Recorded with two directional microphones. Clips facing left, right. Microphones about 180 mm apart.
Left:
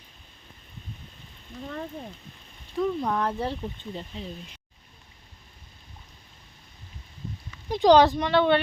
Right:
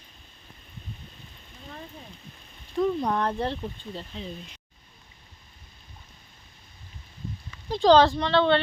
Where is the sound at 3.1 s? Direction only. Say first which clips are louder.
Right 1 dB; 5° left (ahead or behind).